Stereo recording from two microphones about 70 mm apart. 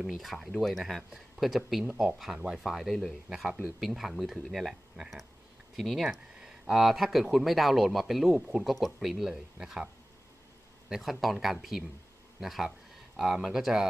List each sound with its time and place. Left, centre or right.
0.1 s speech: centre
3.4 s speech: centre
3.8 s speech: centre
10.9 s speech: centre
12.4 s a sound: centre
13.5 s speech: centre